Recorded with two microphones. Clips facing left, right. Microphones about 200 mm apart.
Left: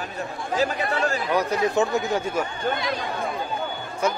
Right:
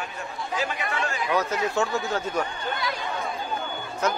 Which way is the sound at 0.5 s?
35° left (ahead or behind).